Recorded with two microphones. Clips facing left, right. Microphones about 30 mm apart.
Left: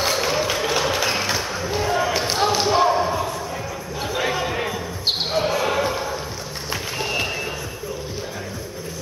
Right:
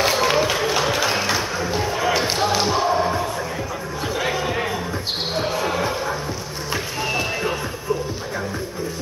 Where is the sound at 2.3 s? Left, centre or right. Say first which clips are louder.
Even; centre.